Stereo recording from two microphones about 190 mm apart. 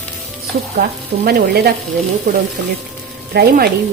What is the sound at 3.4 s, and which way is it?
Speech, 55° right (ahead or behind).